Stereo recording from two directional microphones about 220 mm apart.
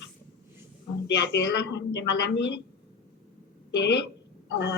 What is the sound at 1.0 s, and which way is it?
Speech, 50° left (ahead or behind).